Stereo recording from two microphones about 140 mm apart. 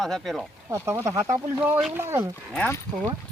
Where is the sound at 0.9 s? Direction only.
20° right (ahead or behind).